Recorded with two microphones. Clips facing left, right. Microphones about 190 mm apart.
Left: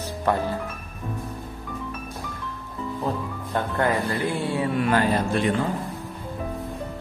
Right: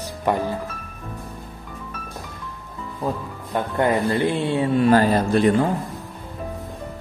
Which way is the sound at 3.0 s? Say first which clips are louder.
Right 3 dB; 15° right (ahead or behind).